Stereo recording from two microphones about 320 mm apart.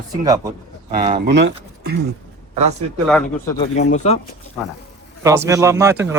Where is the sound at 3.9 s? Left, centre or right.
Left.